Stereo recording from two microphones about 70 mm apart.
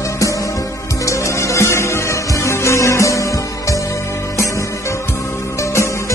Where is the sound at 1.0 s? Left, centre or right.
Left.